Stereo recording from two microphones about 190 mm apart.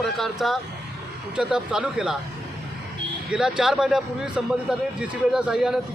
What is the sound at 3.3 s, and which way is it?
A man's voice, 5° right (ahead or behind).